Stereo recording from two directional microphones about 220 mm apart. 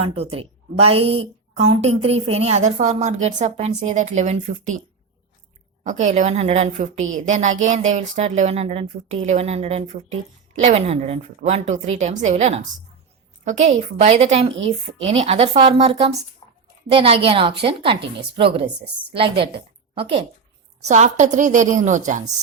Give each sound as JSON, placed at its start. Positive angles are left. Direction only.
{"t": 0.0, "sound": "a woman's voice", "side_deg": -25}
{"t": 5.8, "sound": "a woman's voice", "side_deg": -35}
{"t": 16.4, "sound": "a sound", "side_deg": 15}
{"t": 16.9, "sound": "a woman's voice", "side_deg": -25}